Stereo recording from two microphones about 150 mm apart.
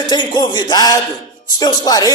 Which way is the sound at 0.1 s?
30° left (ahead or behind).